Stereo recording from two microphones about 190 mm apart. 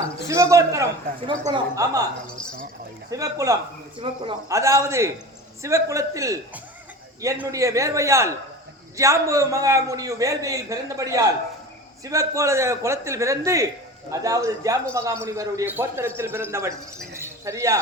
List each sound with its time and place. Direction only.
0.2 s a man's voice: 15° right (ahead or behind)
3.1 s a man's voice: 15° right (ahead or behind)
17.2 s a sound: 15° right (ahead or behind)